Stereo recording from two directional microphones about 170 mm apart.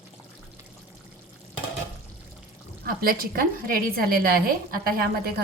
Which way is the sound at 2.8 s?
60° right (ahead or behind).